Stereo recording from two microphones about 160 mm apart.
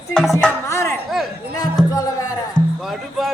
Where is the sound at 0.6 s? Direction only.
20° left (ahead or behind).